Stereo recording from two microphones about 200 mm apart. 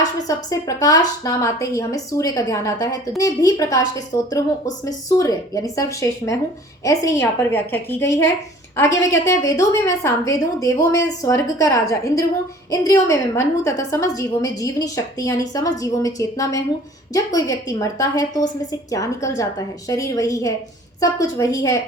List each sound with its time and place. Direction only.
0.3 s a woman's voice: 15° left (ahead or behind)